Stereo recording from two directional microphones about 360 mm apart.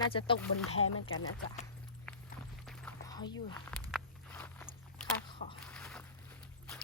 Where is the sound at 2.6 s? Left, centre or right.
Centre.